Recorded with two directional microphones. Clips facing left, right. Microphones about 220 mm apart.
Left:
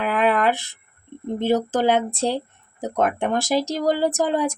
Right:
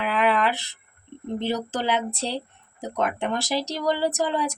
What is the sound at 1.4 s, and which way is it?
Speech, 50° left (ahead or behind).